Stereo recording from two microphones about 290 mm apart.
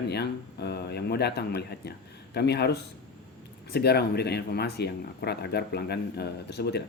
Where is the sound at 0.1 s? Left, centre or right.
Left.